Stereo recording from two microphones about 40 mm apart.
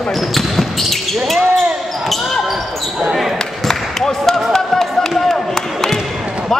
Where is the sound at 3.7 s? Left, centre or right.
Centre.